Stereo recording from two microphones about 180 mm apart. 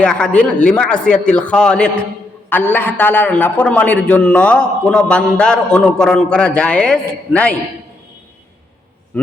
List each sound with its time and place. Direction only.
0.0 s a man's voice: 5° left (ahead or behind)
9.1 s a man's voice: 10° left (ahead or behind)